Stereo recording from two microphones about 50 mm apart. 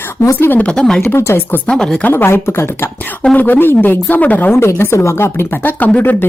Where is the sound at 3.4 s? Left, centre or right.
Left.